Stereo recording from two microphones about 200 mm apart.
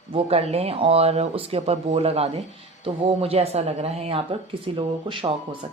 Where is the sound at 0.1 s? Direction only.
30° right (ahead or behind).